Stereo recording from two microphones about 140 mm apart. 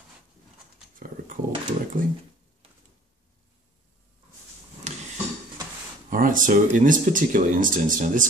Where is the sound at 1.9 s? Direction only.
80° right.